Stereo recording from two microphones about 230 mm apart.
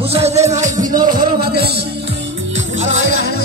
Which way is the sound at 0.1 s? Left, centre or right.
Right.